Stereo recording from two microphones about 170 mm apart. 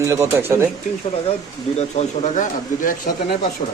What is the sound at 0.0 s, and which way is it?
Speech, 15° right (ahead or behind).